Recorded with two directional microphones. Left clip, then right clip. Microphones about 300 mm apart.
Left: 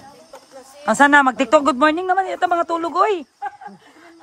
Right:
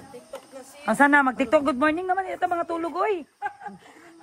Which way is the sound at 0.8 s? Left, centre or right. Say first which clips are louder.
Left 6 dB; centre.